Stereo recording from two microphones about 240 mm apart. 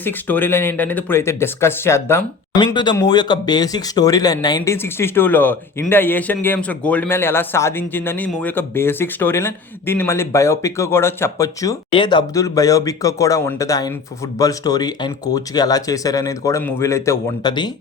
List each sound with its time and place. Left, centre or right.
0.0 s speech: centre